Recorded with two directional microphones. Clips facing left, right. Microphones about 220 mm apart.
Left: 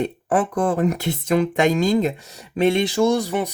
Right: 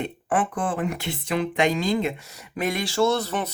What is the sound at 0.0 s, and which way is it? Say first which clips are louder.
Speech: left 4 dB; 40° left (ahead or behind).